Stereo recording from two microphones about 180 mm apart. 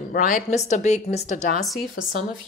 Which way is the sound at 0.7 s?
40° left (ahead or behind).